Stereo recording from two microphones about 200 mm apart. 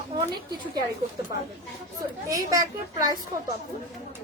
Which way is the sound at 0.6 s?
20° right (ahead or behind).